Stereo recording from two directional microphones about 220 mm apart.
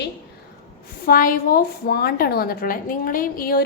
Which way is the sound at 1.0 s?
40° left (ahead or behind).